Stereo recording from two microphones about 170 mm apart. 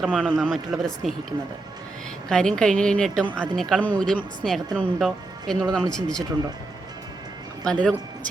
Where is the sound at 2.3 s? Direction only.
5° left (ahead or behind).